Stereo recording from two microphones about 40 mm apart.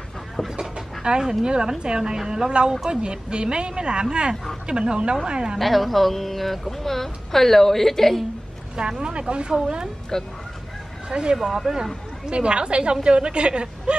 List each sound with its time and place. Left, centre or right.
0.6 s chicken: centre
1.4 s a woman's voice: centre
5.6 s speech: centre
8.7 s a woman's voice: right
10.1 s speech: centre
11.1 s speech: right
11.3 s speech: centre
12.3 s a woman's voice: right